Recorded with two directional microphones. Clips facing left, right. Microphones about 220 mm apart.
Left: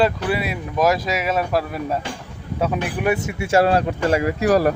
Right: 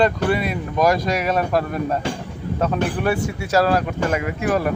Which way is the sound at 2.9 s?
15° left (ahead or behind).